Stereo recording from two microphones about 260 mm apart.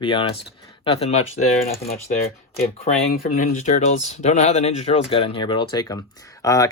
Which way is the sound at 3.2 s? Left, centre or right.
Left.